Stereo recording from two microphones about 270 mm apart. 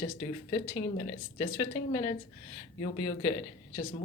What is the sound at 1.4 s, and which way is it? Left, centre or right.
Speech, centre.